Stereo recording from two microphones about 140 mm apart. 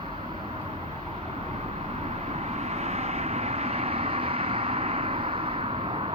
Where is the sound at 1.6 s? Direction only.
50° right (ahead or behind).